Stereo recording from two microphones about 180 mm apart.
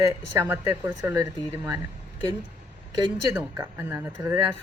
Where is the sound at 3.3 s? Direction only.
10° right (ahead or behind).